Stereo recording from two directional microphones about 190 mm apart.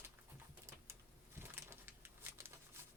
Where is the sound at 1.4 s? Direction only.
10° right (ahead or behind).